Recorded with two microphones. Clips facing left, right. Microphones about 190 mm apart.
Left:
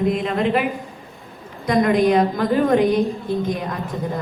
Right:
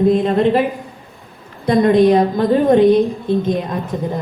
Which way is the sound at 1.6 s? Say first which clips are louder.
Right 5 dB; 30° right (ahead or behind).